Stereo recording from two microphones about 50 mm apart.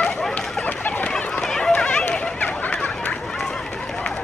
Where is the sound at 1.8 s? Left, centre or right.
Left.